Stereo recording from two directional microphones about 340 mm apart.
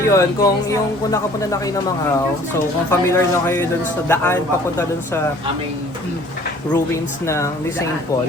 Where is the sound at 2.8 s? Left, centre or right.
Centre.